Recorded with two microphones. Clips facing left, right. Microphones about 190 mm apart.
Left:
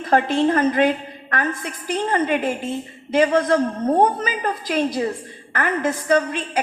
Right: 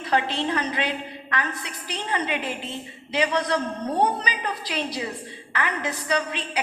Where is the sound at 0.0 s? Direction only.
50° left (ahead or behind).